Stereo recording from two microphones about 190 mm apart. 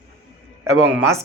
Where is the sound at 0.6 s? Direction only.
15° right (ahead or behind).